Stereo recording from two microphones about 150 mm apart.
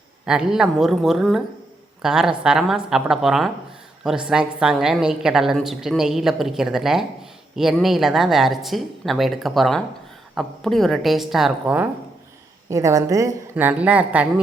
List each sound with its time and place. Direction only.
0.3 s a woman's voice: 5° right (ahead or behind)
12.7 s a woman's voice: 20° right (ahead or behind)
13.7 s speech: 10° right (ahead or behind)